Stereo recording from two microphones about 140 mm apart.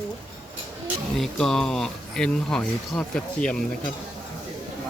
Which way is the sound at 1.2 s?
5° left (ahead or behind).